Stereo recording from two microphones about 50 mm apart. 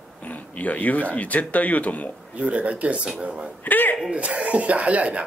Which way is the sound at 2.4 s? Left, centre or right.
Right.